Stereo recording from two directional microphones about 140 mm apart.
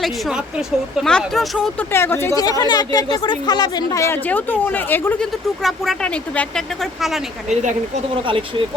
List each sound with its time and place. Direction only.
1.0 s speech: 5° left (ahead or behind)
1.9 s speech: 15° left (ahead or behind)
5.6 s speech: centre (ahead or behind)
7.5 s speech: 60° right (ahead or behind)
8.1 s speech: 40° right (ahead or behind)